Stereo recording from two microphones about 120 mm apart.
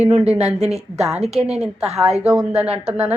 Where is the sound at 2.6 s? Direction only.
10° right (ahead or behind).